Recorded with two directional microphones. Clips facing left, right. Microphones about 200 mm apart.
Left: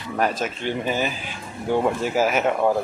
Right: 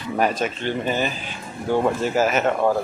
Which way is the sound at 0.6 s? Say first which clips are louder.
Even; 10° left (ahead or behind).